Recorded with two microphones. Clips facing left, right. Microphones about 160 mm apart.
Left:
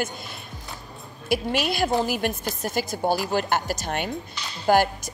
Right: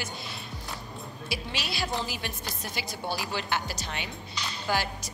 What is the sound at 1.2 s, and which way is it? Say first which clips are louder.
Speech: left 12 dB; 50° left (ahead or behind).